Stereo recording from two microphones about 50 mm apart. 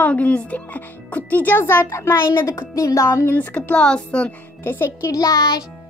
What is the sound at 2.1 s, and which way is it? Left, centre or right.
Speech, left.